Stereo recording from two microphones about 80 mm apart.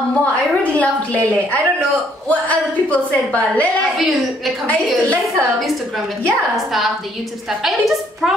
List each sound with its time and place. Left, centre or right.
0.2 s a woman's voice: centre
2.2 s a woman's voice: centre
4.0 s a woman's voice: centre
6.5 s a woman's voice: centre